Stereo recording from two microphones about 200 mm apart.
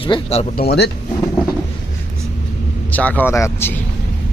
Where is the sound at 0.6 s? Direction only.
55° left (ahead or behind).